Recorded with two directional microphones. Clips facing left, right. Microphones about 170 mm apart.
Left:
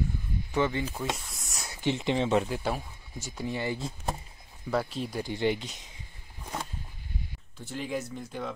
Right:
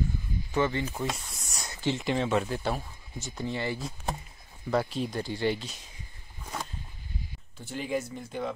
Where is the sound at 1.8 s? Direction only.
20° left (ahead or behind).